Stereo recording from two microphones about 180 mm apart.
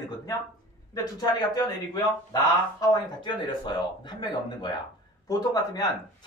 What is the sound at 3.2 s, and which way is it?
Speech, 25° left (ahead or behind).